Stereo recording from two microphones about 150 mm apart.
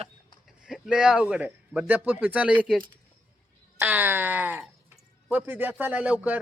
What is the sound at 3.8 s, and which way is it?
Speech, 10° right (ahead or behind).